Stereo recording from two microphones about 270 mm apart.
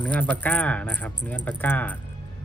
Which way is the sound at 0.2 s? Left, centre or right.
Centre.